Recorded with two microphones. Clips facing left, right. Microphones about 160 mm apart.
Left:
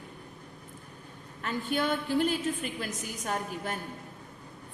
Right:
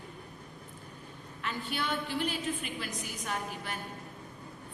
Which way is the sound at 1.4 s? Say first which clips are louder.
Left 6 dB; 45° left (ahead or behind).